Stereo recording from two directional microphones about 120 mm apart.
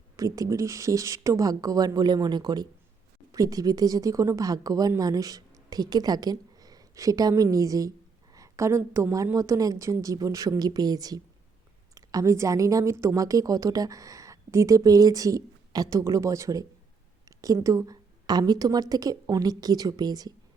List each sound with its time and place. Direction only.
0.2 s a woman's voice: 30° right (ahead or behind)